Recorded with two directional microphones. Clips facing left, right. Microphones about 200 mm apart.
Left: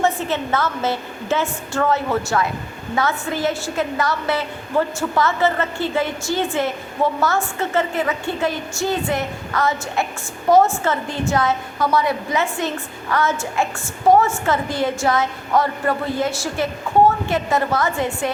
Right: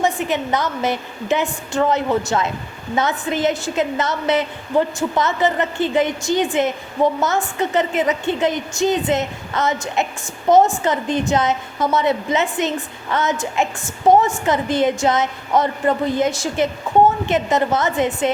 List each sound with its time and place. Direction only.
0.0 s a woman's voice: 15° right (ahead or behind)